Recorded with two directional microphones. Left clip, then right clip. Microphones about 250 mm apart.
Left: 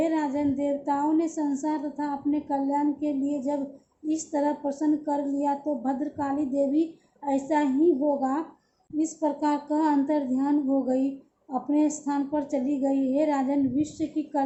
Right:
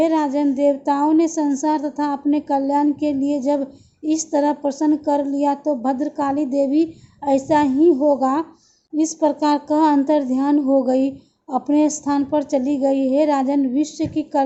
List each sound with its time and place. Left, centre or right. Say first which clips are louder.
0.0 s a woman's voice: right 8 dB; right